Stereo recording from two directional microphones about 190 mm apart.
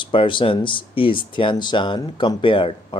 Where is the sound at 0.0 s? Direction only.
25° left (ahead or behind).